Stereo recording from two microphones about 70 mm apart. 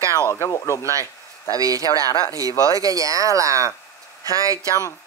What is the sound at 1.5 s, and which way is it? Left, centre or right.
Speech, right.